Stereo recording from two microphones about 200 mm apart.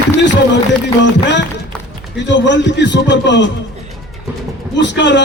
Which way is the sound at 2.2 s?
65° left (ahead or behind).